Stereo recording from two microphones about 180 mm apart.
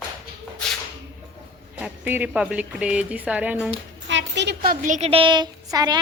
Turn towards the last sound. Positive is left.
turn(degrees=-20)  # may be behind; listen again after turning